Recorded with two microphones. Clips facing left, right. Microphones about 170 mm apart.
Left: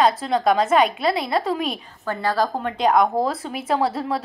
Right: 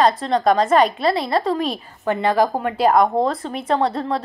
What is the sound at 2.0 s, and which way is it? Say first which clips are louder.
Speech: right 5 dB; 20° right (ahead or behind).